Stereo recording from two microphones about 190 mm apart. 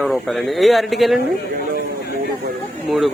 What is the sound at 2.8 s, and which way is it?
Speech, centre (ahead or behind).